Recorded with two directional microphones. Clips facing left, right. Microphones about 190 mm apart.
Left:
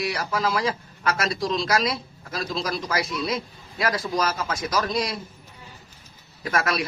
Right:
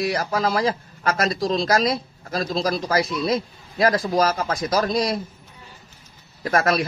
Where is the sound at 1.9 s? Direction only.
45° right (ahead or behind).